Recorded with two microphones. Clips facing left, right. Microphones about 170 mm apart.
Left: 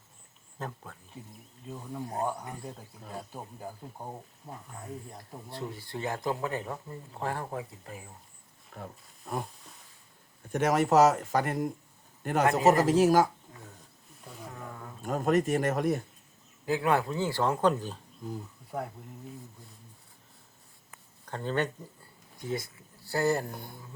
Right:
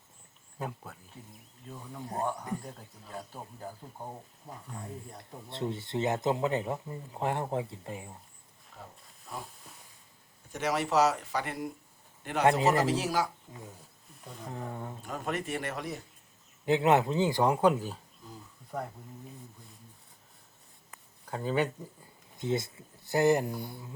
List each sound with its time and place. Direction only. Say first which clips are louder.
0.6 s speech: right 1 dB; 10° right (ahead or behind)
1.7 s speech: left 2 dB; 15° left (ahead or behind)
3.6 s speech: right 1 dB; 10° left (ahead or behind)
5.5 s speech: right 4 dB; 25° right (ahead or behind)
8.7 s speech: left 6 dB; 60° left (ahead or behind)
10.5 s a man's voice: left 5 dB; 50° left (ahead or behind)
13.5 s speech: right 3 dB; 15° right (ahead or behind)
14.5 s speech: right 8 dB; 30° right (ahead or behind)
15.0 s speech: left 10 dB; 45° left (ahead or behind)
16.6 s speech: right 3 dB; 25° right (ahead or behind); by 18.0 s 5° right (ahead or behind)
21.2 s speech: right 1 dB; 5° right (ahead or behind)
22.4 s speech: right 3 dB; 25° right (ahead or behind)